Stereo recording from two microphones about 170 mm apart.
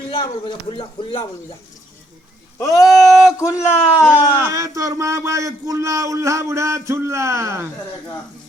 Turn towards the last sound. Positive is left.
turn(degrees=-15)  # may be behind; listen again after turning